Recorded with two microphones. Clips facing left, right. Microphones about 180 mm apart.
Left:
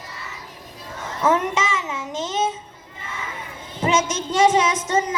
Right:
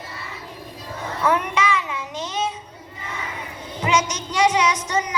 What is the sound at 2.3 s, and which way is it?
Music, 45° left (ahead or behind).